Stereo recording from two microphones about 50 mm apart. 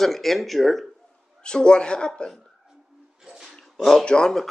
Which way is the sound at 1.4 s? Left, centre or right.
Centre.